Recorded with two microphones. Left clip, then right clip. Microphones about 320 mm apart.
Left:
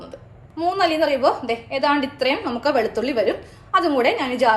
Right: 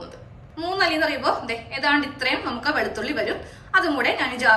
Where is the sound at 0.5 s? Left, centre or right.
Centre.